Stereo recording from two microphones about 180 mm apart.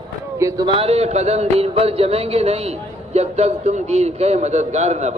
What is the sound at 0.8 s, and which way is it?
Speech, 35° right (ahead or behind).